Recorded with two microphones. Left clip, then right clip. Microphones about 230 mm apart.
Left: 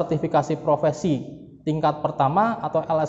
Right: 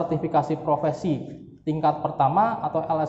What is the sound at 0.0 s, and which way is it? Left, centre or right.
A man's voice, left.